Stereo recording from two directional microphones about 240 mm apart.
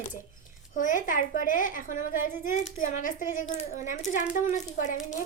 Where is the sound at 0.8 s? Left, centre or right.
Left.